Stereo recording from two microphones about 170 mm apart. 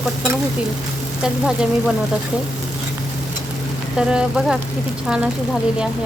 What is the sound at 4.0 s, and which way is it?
Speech, 5° right (ahead or behind).